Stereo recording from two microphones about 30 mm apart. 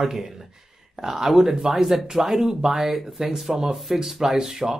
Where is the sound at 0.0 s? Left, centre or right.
Centre.